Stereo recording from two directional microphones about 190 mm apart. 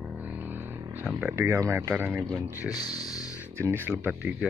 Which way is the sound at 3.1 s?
20° left (ahead or behind).